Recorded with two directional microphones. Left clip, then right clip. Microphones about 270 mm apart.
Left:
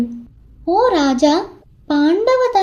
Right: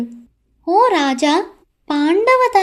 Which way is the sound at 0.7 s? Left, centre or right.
Right.